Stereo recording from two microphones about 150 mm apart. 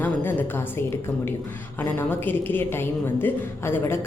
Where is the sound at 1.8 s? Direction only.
15° left (ahead or behind).